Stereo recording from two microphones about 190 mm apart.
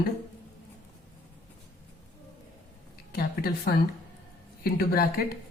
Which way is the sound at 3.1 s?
55° left (ahead or behind).